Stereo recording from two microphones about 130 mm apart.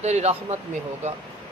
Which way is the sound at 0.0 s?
60° right (ahead or behind).